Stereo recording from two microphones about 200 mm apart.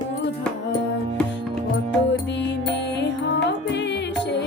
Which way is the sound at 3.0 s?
60° left (ahead or behind).